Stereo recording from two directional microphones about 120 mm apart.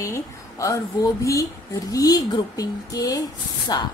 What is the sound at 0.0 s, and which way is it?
A woman's voice, 25° left (ahead or behind).